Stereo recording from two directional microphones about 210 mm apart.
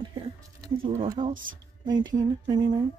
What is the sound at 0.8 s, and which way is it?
A woman's voice, 25° right (ahead or behind).